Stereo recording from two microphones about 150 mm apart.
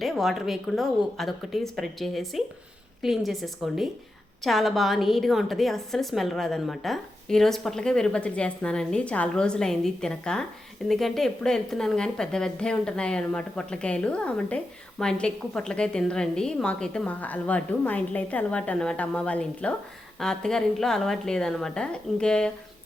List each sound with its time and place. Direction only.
0.0 s a woman's voice: centre (ahead or behind)